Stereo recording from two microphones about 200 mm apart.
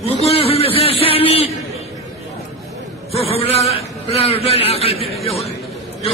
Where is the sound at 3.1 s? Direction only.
30° left (ahead or behind).